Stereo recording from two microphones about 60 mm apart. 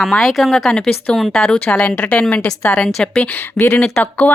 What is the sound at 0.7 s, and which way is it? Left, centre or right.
Speech, centre.